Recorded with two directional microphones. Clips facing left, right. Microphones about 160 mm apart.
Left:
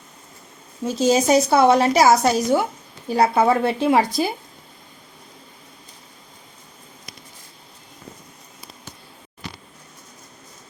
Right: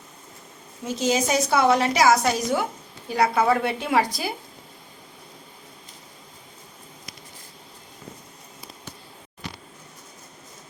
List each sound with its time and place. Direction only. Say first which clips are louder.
0.9 s a woman's voice: left 6 dB; 35° left (ahead or behind)